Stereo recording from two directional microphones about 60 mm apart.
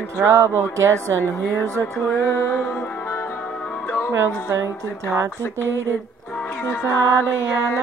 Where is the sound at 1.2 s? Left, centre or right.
Left.